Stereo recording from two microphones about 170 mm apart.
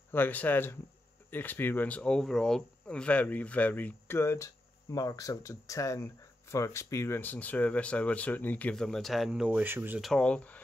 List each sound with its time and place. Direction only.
0.1 s speech: 10° left (ahead or behind); by 10.0 s 10° right (ahead or behind)
10.0 s speech: 5° left (ahead or behind)